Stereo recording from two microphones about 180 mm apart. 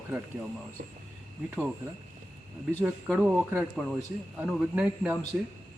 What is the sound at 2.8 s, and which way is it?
Speech, 15° right (ahead or behind).